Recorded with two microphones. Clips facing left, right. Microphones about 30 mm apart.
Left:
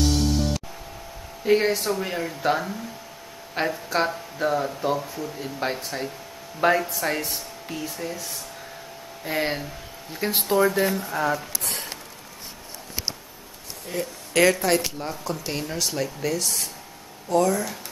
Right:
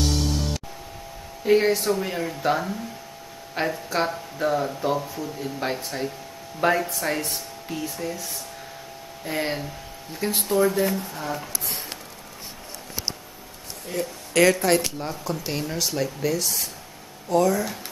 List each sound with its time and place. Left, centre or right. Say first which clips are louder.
0.0 s music: left 2 dB; centre
1.4 s speech: right 1 dB; centre
11.1 s speech: left 6 dB; left
13.8 s speech: right 1 dB; centre